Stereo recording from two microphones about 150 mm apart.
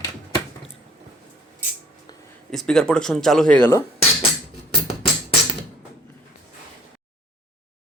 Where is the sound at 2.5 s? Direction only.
5° left (ahead or behind).